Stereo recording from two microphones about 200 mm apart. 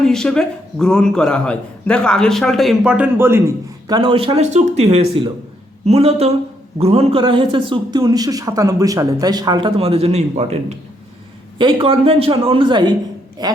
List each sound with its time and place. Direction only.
0.0 s a man's voice: 5° left (ahead or behind); by 13.5 s 20° right (ahead or behind)